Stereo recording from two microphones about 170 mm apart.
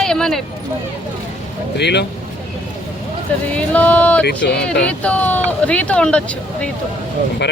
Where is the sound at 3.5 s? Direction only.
10° left (ahead or behind).